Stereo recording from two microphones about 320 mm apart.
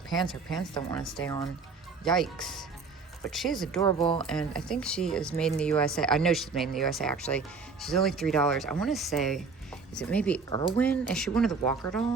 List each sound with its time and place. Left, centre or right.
0.1 s speech: centre
0.7 s speech: centre
1.0 s speech: centre
3.8 s speech: centre
4.3 s speech: centre